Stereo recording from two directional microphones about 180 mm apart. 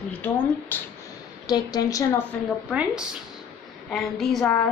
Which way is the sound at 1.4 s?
20° left (ahead or behind).